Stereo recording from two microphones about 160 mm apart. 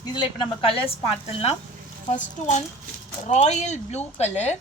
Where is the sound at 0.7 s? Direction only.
35° left (ahead or behind).